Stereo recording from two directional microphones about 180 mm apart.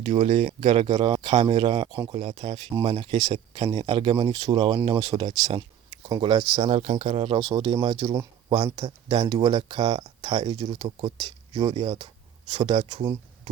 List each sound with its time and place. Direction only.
0.0 s speech: 30° right (ahead or behind)